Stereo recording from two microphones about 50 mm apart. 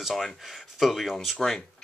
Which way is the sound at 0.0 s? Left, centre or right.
Centre.